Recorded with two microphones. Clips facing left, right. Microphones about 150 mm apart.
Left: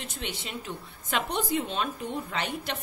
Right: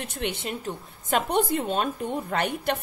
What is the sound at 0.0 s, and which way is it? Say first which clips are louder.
A woman's voice: right 6 dB; 55° right (ahead or behind).